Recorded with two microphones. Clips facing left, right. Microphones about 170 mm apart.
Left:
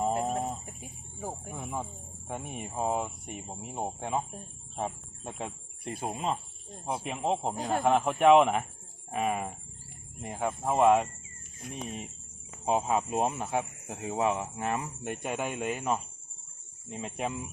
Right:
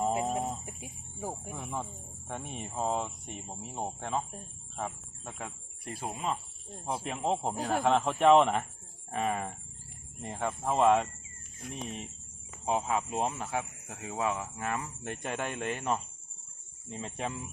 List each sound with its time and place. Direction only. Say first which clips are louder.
0.3 s chicken: left 1 dB; centre (ahead or behind)
0.6 s speech: right 1 dB; 10° right (ahead or behind)
1.5 s speech: left 1 dB; 5° left (ahead or behind)
5.4 s speech: left 5 dB; 20° left (ahead or behind)
6.8 s speech: left 1 dB; 10° left (ahead or behind)